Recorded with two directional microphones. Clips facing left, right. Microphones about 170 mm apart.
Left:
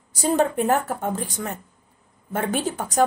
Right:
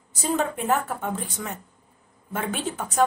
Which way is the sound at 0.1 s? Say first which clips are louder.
Left 5 dB; 40° left (ahead or behind).